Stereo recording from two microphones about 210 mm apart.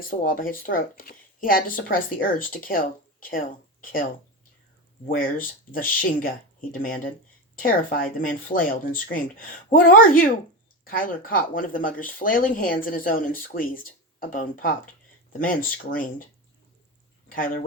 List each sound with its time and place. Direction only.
0.1 s speech: 40° left (ahead or behind)
5.0 s speech: 40° left (ahead or behind)
17.3 s speech: 40° left (ahead or behind)